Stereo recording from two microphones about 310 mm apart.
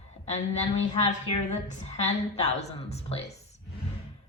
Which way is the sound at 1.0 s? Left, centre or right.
Left.